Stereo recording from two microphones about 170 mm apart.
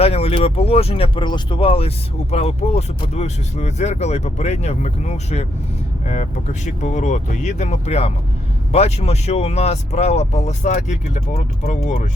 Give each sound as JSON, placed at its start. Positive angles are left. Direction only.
{"t": 0.0, "sound": "speech", "side_deg": 35}